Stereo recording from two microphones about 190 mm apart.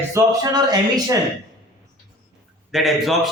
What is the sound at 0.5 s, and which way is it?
Speech, 20° right (ahead or behind).